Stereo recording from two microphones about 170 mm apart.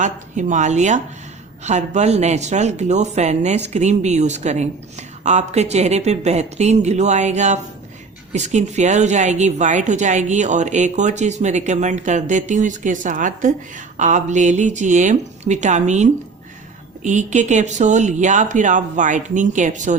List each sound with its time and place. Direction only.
0.0 s a woman's voice: 45° right (ahead or behind)